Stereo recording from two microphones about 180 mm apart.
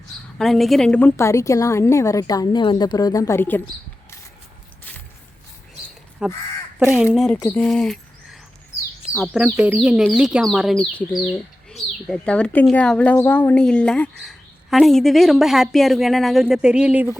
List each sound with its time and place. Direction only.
0.3 s a woman's voice: centre (ahead or behind)
6.2 s speech: 5° right (ahead or behind)
7.3 s speech: 10° left (ahead or behind)
9.6 s speech: 5° right (ahead or behind)